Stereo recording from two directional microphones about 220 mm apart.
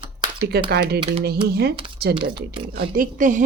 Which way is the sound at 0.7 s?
50° right (ahead or behind).